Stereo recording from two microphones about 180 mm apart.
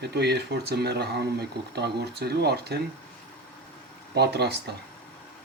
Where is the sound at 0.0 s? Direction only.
65° right (ahead or behind).